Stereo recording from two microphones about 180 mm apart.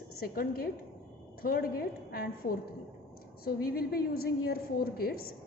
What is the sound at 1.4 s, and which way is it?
A woman's voice, 55° left (ahead or behind).